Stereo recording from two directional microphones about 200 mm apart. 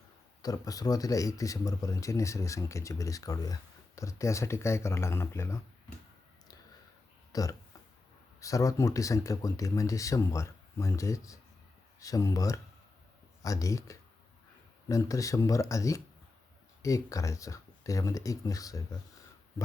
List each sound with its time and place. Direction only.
0.4 s speech: 20° left (ahead or behind)
7.3 s speech: 15° left (ahead or behind)